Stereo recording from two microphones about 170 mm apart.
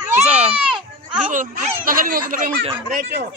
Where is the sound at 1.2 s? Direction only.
50° right (ahead or behind).